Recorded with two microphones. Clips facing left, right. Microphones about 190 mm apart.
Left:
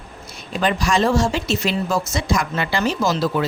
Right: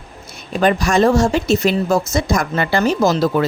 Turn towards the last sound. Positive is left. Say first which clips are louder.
# right 5 dB
turn(degrees=-45)  # may be behind; listen again after turning